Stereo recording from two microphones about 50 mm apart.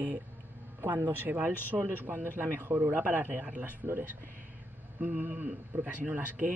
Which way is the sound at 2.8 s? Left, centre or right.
Right.